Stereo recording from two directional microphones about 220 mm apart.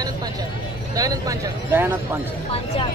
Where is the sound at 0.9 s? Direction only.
15° right (ahead or behind).